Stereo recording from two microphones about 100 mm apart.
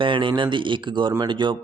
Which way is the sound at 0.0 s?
55° right (ahead or behind).